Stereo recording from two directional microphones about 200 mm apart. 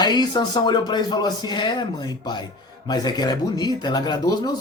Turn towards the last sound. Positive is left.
turn(degrees=20)  # may be behind; listen again after turning